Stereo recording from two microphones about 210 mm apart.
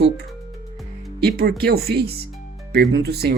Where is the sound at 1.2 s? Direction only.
50° right (ahead or behind).